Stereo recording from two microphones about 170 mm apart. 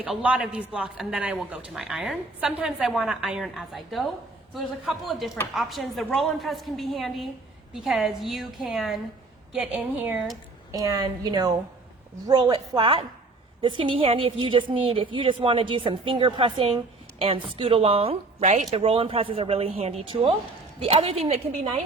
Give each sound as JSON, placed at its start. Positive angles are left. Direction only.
{"t": 0.0, "sound": "a woman's voice", "side_deg": -5}
{"t": 10.7, "sound": "a woman's voice", "side_deg": -20}